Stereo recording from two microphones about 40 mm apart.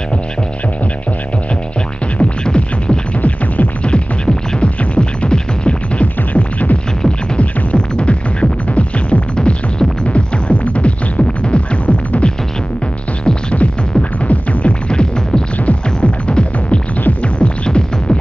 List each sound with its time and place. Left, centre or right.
2.1 s music: left
3.2 s music: left
3.8 s music: left
7.3 s music: left
13.2 s music: left
14.2 s music: left
14.9 s music: left